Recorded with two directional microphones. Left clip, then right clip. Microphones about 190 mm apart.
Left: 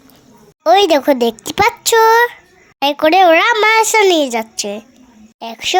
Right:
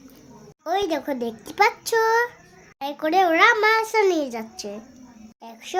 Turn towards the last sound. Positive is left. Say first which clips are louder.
# left 18 dB
turn(degrees=35)  # may be behind; listen again after turning